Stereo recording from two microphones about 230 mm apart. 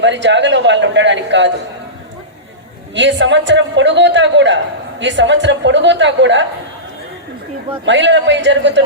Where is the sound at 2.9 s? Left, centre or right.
Right.